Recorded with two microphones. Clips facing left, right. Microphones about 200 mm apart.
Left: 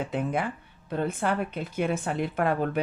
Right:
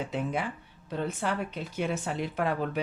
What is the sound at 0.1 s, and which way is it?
Speech, 55° left (ahead or behind).